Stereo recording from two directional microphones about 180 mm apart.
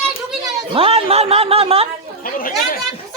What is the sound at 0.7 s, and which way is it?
Speech, 30° right (ahead or behind).